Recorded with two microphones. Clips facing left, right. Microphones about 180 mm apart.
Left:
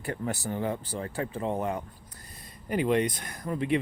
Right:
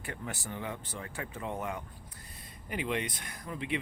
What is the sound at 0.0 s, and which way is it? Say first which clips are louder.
Speech: left 8 dB; 35° left (ahead or behind).